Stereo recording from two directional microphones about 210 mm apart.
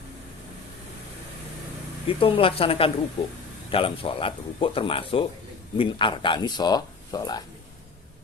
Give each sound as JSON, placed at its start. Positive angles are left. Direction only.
{"t": 2.0, "sound": "speech", "side_deg": 25}